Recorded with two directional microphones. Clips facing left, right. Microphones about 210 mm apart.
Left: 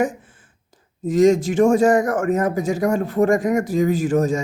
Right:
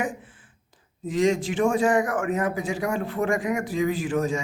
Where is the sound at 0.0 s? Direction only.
45° left (ahead or behind).